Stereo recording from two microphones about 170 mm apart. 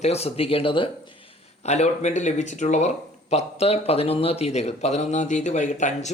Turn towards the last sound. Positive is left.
turn(degrees=45)  # may be behind; listen again after turning